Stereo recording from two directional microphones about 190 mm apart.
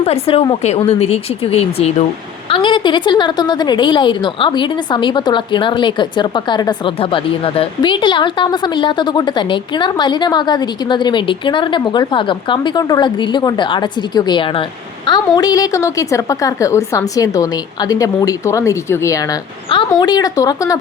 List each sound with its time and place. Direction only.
0.0 s a woman's voice: 30° left (ahead or behind)